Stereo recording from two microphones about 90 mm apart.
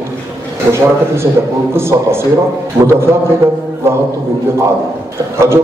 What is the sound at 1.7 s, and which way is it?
A man's voice, 30° right (ahead or behind).